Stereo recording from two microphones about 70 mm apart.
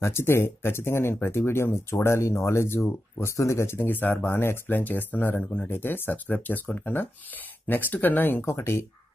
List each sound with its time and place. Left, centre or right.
0.0 s speech: left